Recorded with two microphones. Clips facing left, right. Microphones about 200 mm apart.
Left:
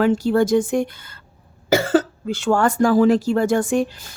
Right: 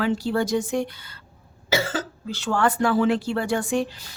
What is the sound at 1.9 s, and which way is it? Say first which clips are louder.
Speech: left 11 dB; 55° left (ahead or behind).